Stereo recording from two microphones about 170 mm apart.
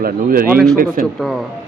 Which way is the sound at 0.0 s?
60° right (ahead or behind).